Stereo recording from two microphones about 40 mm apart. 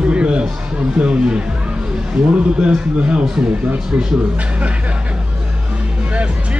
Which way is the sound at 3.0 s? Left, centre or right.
Right.